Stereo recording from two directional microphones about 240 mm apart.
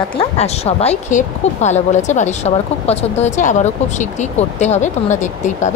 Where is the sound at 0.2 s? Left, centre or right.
Left.